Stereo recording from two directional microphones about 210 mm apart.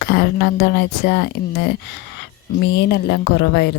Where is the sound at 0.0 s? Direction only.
50° left (ahead or behind).